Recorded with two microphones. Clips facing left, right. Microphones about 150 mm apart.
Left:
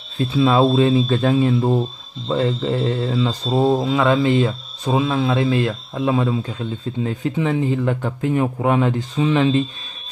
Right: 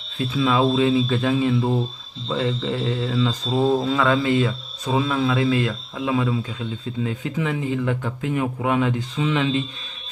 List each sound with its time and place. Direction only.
0.2 s speech: 35° left (ahead or behind)
3.7 s speech: 15° left (ahead or behind); by 9.7 s 40° left (ahead or behind)